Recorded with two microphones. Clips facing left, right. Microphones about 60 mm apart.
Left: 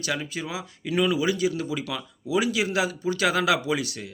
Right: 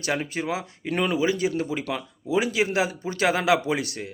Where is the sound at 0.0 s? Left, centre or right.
Right.